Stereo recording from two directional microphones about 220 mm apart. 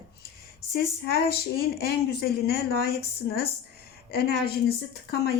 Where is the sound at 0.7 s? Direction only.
45° left (ahead or behind).